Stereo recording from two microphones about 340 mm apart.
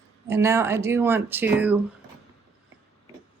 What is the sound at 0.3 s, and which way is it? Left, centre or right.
Speech, centre.